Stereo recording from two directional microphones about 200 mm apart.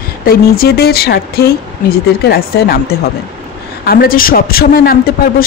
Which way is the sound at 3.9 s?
45° left (ahead or behind).